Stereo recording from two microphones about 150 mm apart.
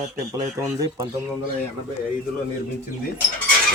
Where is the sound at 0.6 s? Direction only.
15° right (ahead or behind).